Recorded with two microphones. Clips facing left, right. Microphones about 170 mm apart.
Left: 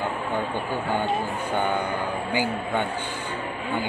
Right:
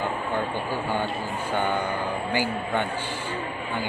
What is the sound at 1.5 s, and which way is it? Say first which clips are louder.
A man's voice: even; 15° left (ahead or behind).